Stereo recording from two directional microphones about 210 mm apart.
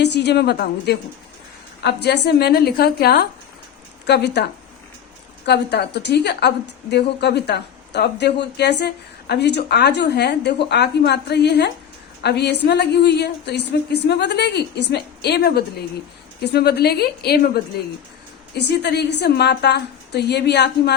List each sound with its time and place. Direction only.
0.0 s a woman's voice: 55° left (ahead or behind)
5.5 s a woman's voice: 50° left (ahead or behind)